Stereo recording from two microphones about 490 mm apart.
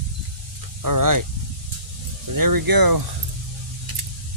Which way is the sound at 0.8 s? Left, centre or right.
Right.